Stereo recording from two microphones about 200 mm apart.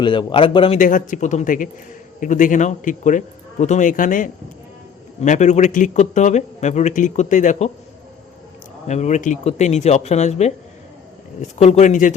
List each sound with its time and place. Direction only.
0.0 s a man's voice: 25° left (ahead or behind)
0.8 s a man's voice: 40° left (ahead or behind)
8.9 s a man's voice: 35° left (ahead or behind)